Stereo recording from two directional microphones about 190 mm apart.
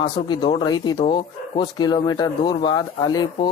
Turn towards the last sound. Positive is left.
turn(degrees=20)  # may be behind; listen again after turning